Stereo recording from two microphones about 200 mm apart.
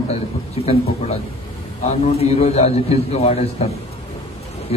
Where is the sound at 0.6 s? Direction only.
30° left (ahead or behind).